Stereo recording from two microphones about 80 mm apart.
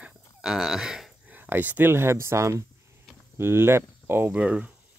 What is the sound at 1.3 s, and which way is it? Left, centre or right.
Speech, right.